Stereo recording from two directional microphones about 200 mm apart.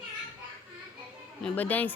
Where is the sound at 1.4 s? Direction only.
10° left (ahead or behind).